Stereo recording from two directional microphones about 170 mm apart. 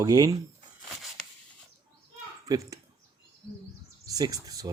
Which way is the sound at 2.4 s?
20° right (ahead or behind).